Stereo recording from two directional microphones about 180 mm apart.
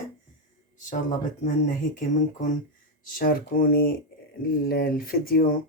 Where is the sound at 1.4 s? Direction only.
45° left (ahead or behind).